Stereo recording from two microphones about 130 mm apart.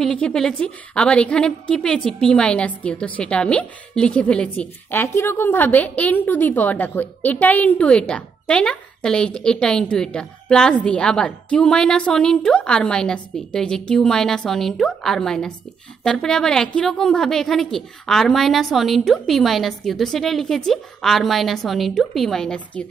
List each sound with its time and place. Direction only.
0.0 s a woman's voice: 5° left (ahead or behind)